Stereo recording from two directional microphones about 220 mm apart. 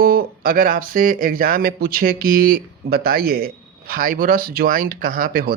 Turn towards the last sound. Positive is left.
turn(degrees=-40)  # may be behind; listen again after turning